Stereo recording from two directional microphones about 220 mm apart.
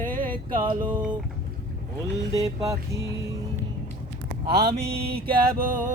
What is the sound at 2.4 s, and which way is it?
Music, 15° right (ahead or behind).